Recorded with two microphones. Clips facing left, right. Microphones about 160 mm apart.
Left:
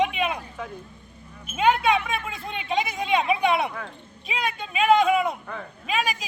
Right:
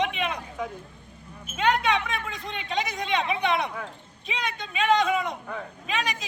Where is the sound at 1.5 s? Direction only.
5° left (ahead or behind).